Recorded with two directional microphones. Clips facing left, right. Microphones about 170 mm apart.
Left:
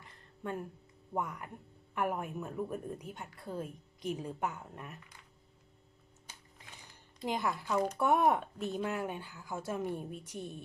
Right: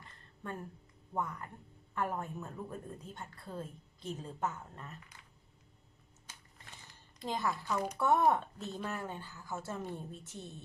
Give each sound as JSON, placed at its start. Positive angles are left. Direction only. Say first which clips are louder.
{"t": 0.0, "sound": "a sound", "louder": "left 4 dB", "side_deg": 15}
{"t": 1.1, "sound": "a woman's voice", "louder": "left 1 dB", "side_deg": 15}
{"t": 7.2, "sound": "a woman's voice", "louder": "left 1 dB", "side_deg": 15}